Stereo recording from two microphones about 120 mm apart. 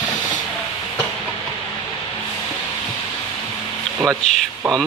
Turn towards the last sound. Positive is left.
turn(degrees=5)  # may be behind; listen again after turning